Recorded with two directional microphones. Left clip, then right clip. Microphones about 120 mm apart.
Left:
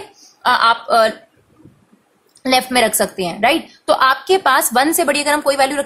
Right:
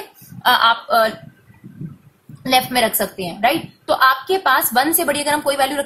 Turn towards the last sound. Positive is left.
turn(degrees=25)  # may be behind; listen again after turning